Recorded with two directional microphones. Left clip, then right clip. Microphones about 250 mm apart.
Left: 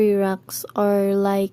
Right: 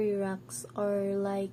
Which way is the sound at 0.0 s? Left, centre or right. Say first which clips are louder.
Left 12 dB; left.